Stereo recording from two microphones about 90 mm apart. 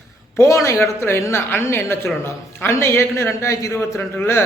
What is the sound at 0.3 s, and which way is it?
A man's voice, 30° left (ahead or behind).